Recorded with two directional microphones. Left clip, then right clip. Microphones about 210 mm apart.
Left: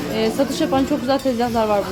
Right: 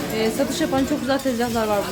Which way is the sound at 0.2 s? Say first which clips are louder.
Left 2 dB; 10° left (ahead or behind).